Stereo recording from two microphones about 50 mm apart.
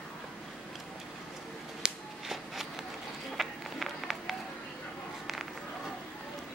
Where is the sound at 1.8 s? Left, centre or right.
Centre.